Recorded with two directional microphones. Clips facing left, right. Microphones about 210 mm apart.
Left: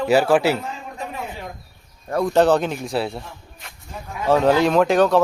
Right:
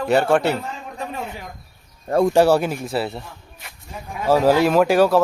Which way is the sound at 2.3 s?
10° right (ahead or behind).